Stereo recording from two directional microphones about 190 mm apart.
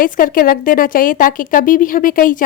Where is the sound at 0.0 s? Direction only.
50° left (ahead or behind).